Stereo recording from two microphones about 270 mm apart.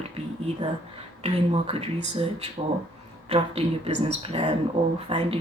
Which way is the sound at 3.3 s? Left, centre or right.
Right.